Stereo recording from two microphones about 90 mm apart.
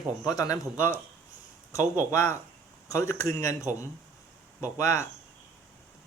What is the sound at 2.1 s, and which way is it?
Speech, 30° left (ahead or behind).